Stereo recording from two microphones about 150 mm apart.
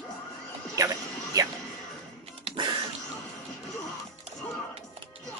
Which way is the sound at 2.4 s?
35° right (ahead or behind).